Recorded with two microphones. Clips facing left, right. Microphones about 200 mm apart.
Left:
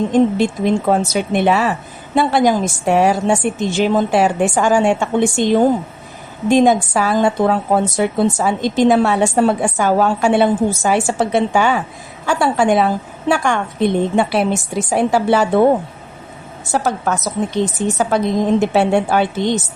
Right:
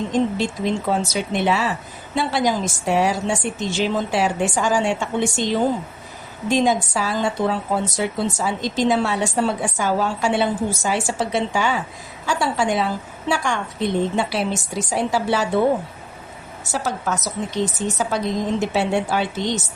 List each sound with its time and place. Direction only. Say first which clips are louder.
0.1 s a woman's voice: left 7 dB; 55° left (ahead or behind)
16.7 s a woman's voice: left 6 dB; 55° left (ahead or behind)